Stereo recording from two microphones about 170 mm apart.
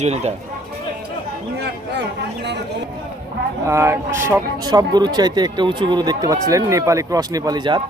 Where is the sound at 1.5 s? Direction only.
85° right.